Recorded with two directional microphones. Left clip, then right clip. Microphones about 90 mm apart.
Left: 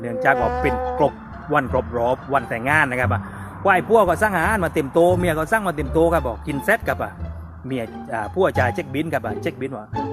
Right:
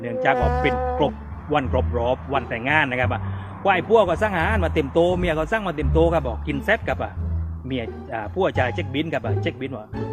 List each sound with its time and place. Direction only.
0.3 s music: centre (ahead or behind)
0.9 s speech: 15° right (ahead or behind)
2.6 s a man's voice: 10° right (ahead or behind)